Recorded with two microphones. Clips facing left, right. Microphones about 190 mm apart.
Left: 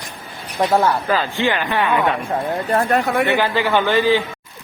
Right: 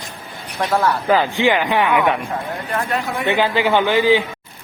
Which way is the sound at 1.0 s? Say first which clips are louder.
Right 3 dB; 15° right (ahead or behind).